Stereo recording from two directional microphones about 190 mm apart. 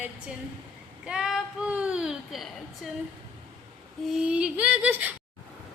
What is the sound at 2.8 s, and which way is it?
Speech, centre (ahead or behind).